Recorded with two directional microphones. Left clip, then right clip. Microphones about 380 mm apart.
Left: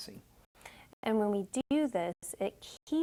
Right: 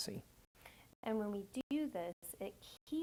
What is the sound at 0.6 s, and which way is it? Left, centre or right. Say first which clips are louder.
A woman's voice: left 9 dB; left.